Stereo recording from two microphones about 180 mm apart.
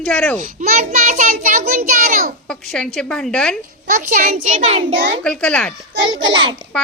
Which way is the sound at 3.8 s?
45° right (ahead or behind).